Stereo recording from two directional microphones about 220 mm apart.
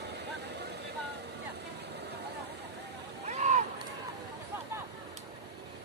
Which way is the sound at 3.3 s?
30° right (ahead or behind).